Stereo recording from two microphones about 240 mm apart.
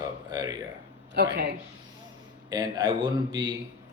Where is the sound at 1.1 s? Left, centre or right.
Right.